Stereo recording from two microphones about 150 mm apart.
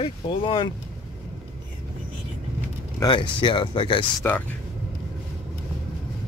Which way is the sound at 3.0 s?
30° left (ahead or behind).